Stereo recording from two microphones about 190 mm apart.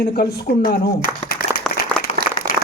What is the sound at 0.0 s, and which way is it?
Speech, 60° left (ahead or behind).